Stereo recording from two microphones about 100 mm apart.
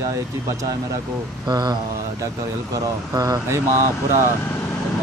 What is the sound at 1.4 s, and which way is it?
Speech, 45° right (ahead or behind).